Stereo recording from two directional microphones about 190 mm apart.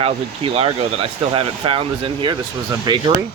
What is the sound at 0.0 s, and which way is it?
Speech, 30° right (ahead or behind).